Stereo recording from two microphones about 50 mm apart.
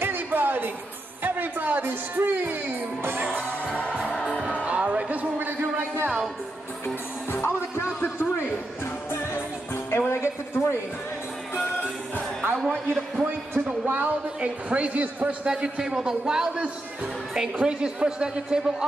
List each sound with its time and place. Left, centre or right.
0.0 s music: right
1.2 s speech: right
3.9 s music: right
5.6 s speech: right
7.4 s music: left
8.0 s a sound: left
9.1 s music: left
9.8 s music: left
12.9 s a sound: right
13.8 s a man's voice: right
15.4 s a man's voice: centre